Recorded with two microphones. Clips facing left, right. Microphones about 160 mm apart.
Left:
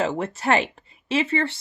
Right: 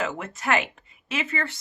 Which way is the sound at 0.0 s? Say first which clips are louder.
Left 5 dB; 30° left (ahead or behind).